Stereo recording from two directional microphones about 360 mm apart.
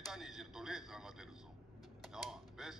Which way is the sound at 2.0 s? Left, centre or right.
Centre.